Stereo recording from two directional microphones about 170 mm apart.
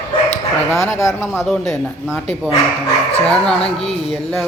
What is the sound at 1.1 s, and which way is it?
Speech, centre (ahead or behind).